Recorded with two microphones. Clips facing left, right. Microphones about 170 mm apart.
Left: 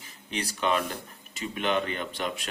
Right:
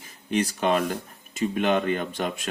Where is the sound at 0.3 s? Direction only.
45° right (ahead or behind).